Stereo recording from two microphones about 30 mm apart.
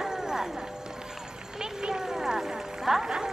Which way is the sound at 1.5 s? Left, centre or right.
Centre.